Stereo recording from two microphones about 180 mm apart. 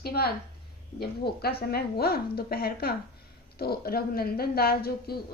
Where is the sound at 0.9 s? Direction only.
60° left (ahead or behind).